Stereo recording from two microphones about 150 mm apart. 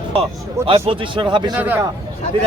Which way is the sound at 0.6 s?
35° right (ahead or behind).